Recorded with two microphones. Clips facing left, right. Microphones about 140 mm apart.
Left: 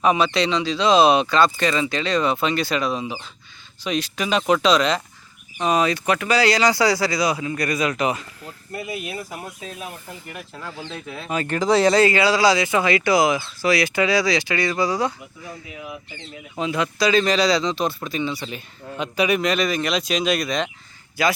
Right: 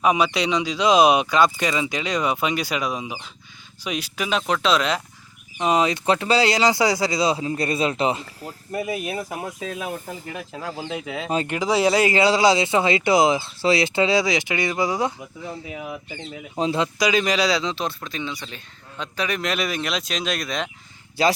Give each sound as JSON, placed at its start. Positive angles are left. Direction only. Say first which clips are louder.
{"t": 0.0, "sound": "speech", "louder": "left 1 dB", "side_deg": -10}
{"t": 5.5, "sound": "speech", "louder": "even", "side_deg": -20}
{"t": 10.9, "sound": "speech", "louder": "right 5 dB", "side_deg": -90}
{"t": 11.4, "sound": "speech", "louder": "left 4 dB", "side_deg": -10}
{"t": 12.1, "sound": "speech", "louder": "even", "side_deg": -25}
{"t": 16.6, "sound": "speech", "louder": "right 2 dB", "side_deg": -35}
{"t": 16.8, "sound": "speech", "louder": "left 6 dB", "side_deg": -15}
{"t": 19.4, "sound": "speech", "louder": "left 4 dB", "side_deg": -5}
{"t": 21.2, "sound": "speech", "louder": "right 1 dB", "side_deg": -30}